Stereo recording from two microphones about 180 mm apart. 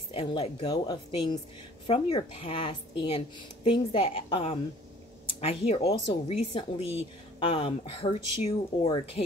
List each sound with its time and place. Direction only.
0.1 s a woman's voice: 30° left (ahead or behind)